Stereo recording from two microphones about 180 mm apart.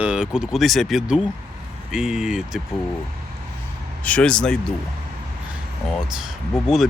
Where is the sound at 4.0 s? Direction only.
5° left (ahead or behind).